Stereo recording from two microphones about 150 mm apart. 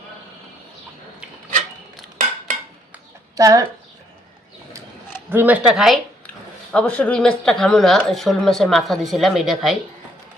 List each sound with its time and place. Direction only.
3.3 s speech: 25° right (ahead or behind)
5.3 s speech: 10° right (ahead or behind)